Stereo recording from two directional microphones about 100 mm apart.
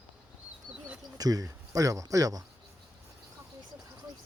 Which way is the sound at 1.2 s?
40° right (ahead or behind).